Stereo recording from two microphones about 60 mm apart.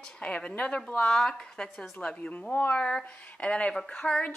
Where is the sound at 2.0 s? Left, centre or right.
Left.